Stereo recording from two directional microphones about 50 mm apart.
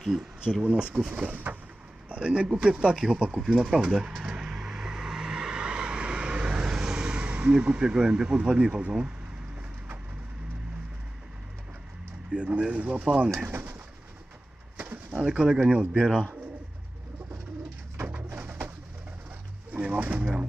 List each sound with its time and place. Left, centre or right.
0.0 s speech: centre
0.6 s speech: right
1.3 s a sound: right
2.0 s speech: right
3.6 s vehicle: centre
12.3 s speech: right
13.5 s speech: right
14.8 s speech: right
19.8 s speech: right